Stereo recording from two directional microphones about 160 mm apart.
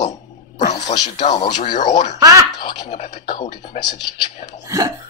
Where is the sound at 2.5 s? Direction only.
30° left (ahead or behind).